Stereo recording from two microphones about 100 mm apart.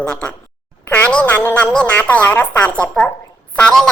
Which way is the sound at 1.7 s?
15° left (ahead or behind).